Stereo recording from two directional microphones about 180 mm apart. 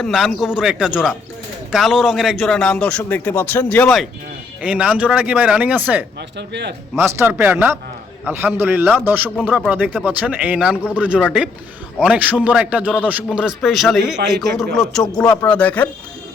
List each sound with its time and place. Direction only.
0.0 s a man's voice: centre (ahead or behind)
6.3 s speech: 70° right (ahead or behind)
6.9 s a man's voice: 15° right (ahead or behind); by 15.9 s 10° left (ahead or behind)